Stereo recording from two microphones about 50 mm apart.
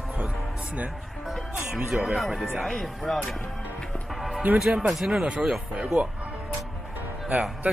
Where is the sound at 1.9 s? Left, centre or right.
Centre.